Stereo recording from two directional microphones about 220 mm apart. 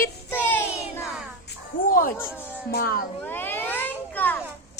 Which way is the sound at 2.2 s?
10° left (ahead or behind).